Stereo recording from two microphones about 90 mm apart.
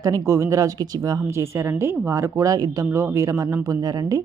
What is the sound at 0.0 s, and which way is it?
A woman's voice, 35° right (ahead or behind).